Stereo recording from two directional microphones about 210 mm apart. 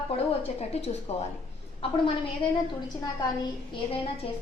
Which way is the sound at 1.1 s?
30° left (ahead or behind).